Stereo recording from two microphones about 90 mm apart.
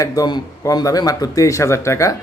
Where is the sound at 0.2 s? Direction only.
40° left (ahead or behind).